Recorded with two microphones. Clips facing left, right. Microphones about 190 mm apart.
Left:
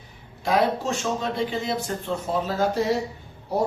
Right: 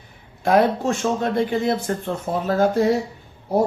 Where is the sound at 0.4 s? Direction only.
55° right (ahead or behind).